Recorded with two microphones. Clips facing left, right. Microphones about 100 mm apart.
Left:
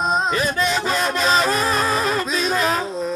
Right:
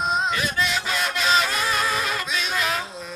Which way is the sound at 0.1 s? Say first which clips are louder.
Left 4 dB; 40° left (ahead or behind).